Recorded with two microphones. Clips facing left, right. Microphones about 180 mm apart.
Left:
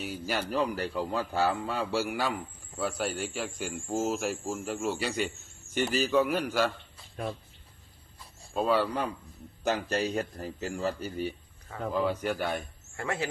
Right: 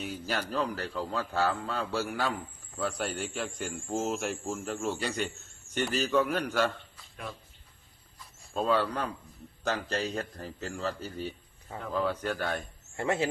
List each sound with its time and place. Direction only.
0.0 s a man's voice: 10° left (ahead or behind)
6.9 s speech: 35° left (ahead or behind)
8.5 s a man's voice: 10° left (ahead or behind)
13.0 s a man's voice: 25° right (ahead or behind)